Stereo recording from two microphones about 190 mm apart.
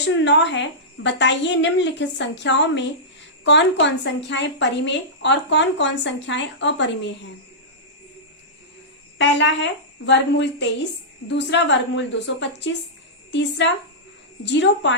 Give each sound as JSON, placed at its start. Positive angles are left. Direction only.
{"t": 0.0, "sound": "a woman's voice", "side_deg": 65}
{"t": 9.1, "sound": "a woman's voice", "side_deg": 70}